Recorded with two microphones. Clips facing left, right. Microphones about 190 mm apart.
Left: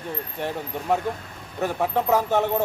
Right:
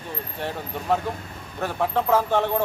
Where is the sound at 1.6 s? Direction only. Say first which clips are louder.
Left 1 dB; 15° left (ahead or behind).